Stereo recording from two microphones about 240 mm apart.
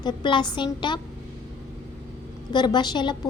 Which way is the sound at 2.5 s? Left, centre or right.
Centre.